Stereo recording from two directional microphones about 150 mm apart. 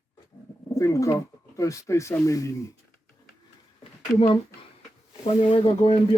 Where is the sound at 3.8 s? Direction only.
40° left (ahead or behind).